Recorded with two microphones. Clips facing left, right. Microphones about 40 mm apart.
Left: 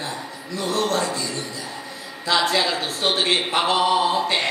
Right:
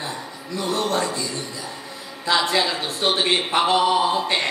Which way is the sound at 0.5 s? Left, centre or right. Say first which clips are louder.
Even; centre.